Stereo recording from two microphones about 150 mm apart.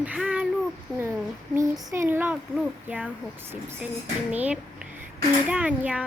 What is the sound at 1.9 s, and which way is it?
Speech, 15° right (ahead or behind).